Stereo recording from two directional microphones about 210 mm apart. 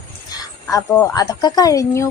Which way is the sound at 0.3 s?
15° left (ahead or behind).